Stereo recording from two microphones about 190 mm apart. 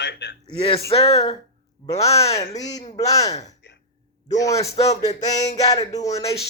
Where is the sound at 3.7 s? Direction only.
70° left (ahead or behind).